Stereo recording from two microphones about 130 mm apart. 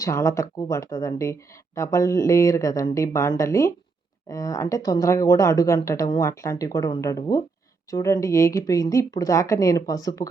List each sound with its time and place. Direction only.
0.0 s speech: 20° left (ahead or behind)